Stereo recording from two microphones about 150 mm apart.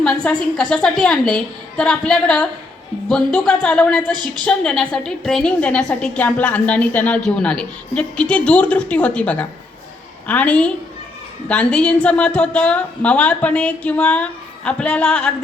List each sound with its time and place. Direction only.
0.0 s a woman's voice: 5° left (ahead or behind)
4.1 s a woman's voice: 30° right (ahead or behind)
4.4 s a woman's voice: 5° left (ahead or behind)